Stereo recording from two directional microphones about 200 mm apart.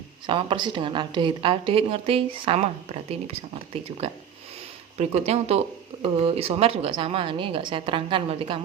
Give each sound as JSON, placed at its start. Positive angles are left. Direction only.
{"t": 0.3, "sound": "a woman's voice", "side_deg": -25}
{"t": 4.9, "sound": "a woman's voice", "side_deg": -35}